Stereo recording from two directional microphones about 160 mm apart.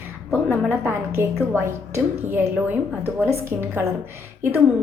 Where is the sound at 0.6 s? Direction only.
15° right (ahead or behind).